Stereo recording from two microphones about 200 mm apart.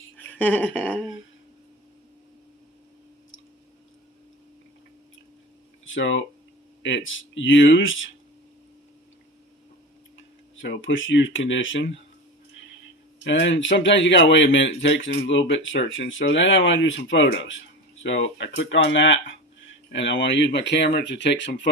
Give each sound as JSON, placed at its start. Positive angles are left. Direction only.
{"t": 0.2, "sound": "a sound", "side_deg": 10}
{"t": 5.8, "sound": "speech", "side_deg": 70}
{"t": 10.2, "sound": "speech", "side_deg": 70}
{"t": 13.2, "sound": "speech", "side_deg": 65}